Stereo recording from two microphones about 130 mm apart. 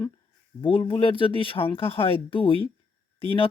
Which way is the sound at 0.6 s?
40° left (ahead or behind).